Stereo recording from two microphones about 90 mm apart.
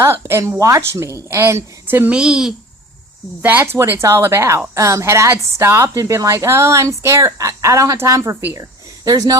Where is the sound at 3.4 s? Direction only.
20° right (ahead or behind).